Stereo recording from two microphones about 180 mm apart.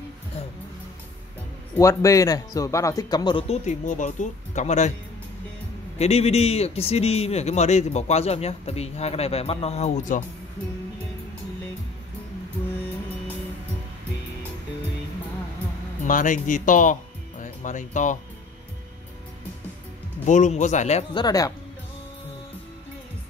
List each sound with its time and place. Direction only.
1.8 s speech: 15° left (ahead or behind); by 4.9 s 40° left (ahead or behind)
5.9 s a man's voice: 35° left (ahead or behind)
16.1 s speech: 45° left (ahead or behind)
20.2 s a man's voice: 40° left (ahead or behind)
21.1 s speech: 20° left (ahead or behind)